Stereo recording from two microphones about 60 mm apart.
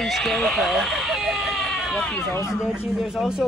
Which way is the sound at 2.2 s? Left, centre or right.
Left.